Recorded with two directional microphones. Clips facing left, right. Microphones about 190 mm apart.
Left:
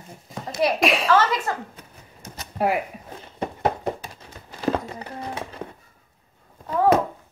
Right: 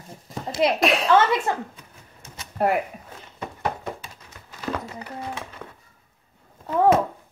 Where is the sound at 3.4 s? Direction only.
35° left (ahead or behind).